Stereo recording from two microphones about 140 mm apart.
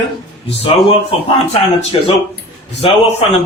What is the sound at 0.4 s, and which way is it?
A man's voice, 45° left (ahead or behind).